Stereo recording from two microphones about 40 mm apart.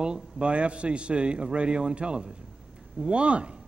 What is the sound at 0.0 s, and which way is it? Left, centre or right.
Speech, right.